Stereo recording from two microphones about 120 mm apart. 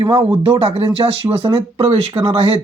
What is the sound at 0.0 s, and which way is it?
Speech, 50° right (ahead or behind).